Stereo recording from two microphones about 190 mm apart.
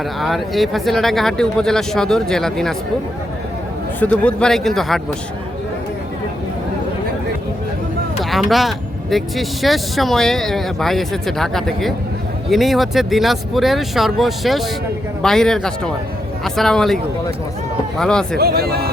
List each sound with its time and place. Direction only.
0.2 s speech: centre (ahead or behind)
4.0 s speech: 5° left (ahead or behind)
8.2 s speech: centre (ahead or behind)
18.3 s speech: 55° right (ahead or behind)